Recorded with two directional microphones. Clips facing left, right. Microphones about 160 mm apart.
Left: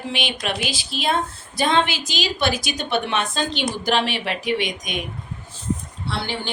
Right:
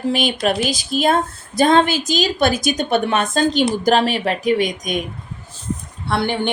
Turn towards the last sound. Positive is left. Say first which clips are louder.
# right 8 dB
turn(degrees=-55)  # may be behind; listen again after turning